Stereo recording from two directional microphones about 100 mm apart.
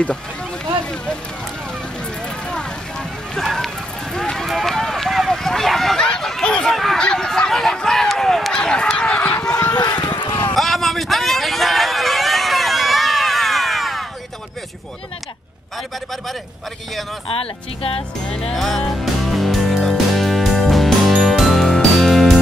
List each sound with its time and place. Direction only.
2.2 s a sound: 10° left (ahead or behind)
9.8 s run: 40° left (ahead or behind)
10.5 s vehicle: centre (ahead or behind)
17.3 s speech: 70° left (ahead or behind)
18.5 s music: 5° left (ahead or behind)